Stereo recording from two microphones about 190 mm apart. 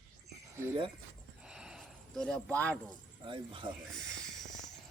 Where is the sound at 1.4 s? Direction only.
5° right (ahead or behind).